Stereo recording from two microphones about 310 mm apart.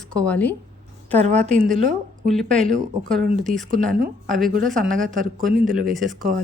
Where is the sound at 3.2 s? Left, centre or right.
Right.